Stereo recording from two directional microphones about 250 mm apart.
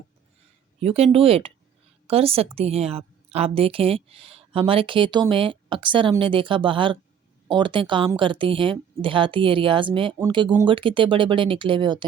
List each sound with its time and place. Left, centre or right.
0.8 s a woman's voice: right